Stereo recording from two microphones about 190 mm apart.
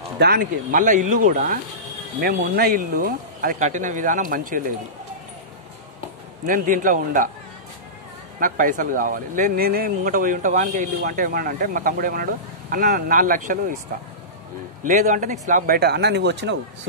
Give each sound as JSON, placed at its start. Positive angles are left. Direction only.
{"t": 0.2, "sound": "speech", "side_deg": -50}
{"t": 2.2, "sound": "speech", "side_deg": -55}
{"t": 6.4, "sound": "speech", "side_deg": -45}
{"t": 8.4, "sound": "speech", "side_deg": -45}
{"t": 14.8, "sound": "a man's voice", "side_deg": -40}